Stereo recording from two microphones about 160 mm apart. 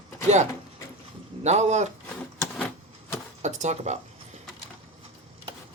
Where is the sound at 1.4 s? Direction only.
45° right (ahead or behind).